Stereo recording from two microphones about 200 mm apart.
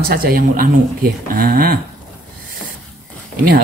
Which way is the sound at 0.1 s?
45° right (ahead or behind).